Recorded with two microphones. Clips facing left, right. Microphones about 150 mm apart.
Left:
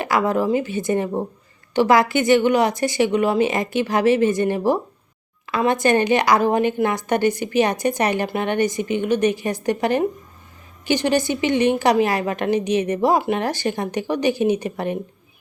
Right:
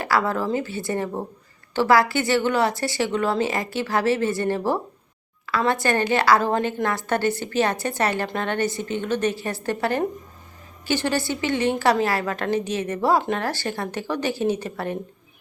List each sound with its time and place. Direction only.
0.0 s a woman's voice: 20° left (ahead or behind)